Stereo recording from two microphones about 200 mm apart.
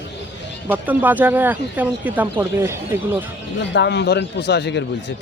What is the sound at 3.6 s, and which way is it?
A man's voice, 60° left (ahead or behind).